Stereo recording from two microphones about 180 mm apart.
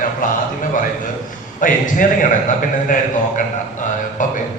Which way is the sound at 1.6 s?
45° left (ahead or behind).